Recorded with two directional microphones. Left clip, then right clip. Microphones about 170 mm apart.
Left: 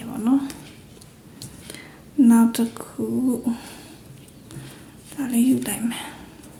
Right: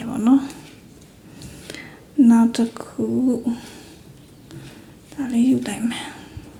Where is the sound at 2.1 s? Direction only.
10° right (ahead or behind).